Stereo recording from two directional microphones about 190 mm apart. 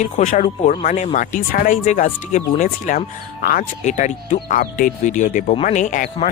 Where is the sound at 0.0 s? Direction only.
40° left (ahead or behind).